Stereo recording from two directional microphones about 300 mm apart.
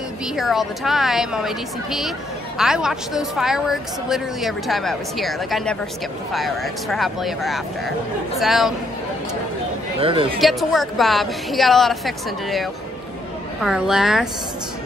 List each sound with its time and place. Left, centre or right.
0.4 s a woman's voice: centre
9.9 s speech: centre
10.4 s a woman's voice: centre
13.6 s a woman's voice: centre